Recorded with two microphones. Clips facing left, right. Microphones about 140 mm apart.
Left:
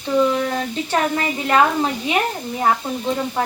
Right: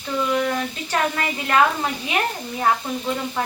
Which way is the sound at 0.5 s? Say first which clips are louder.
Left 3 dB; 25° left (ahead or behind).